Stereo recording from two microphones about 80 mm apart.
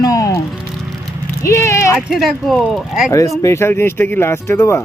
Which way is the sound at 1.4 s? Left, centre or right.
Left.